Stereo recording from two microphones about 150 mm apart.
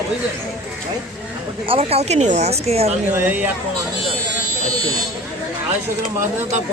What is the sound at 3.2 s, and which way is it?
Speech, 10° right (ahead or behind).